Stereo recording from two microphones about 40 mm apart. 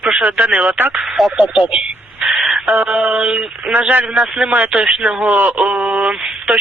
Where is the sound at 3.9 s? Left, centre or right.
Right.